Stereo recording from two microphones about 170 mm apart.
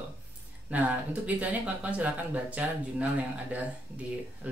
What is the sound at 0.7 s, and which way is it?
Speech, 10° right (ahead or behind).